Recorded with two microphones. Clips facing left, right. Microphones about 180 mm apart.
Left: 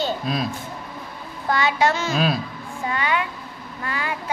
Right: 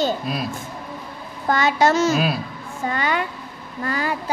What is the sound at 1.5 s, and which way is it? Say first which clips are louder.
A woman's voice: right 3 dB; 45° right (ahead or behind).